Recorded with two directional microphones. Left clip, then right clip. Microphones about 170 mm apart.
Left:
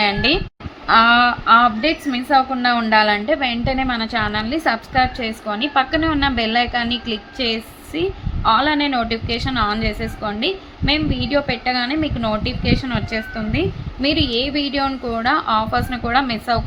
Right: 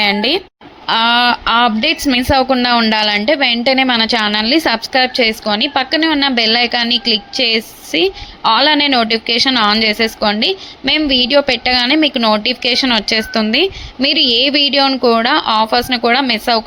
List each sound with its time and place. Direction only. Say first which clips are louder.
0.0 s a woman's voice: right 3 dB; 35° right (ahead or behind)